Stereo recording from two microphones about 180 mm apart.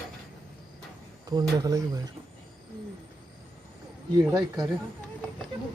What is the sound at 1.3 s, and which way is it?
Speech, 20° right (ahead or behind).